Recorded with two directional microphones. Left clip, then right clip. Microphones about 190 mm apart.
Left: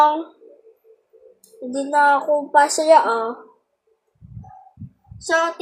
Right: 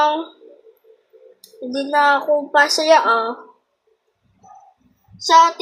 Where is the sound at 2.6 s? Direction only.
25° right (ahead or behind).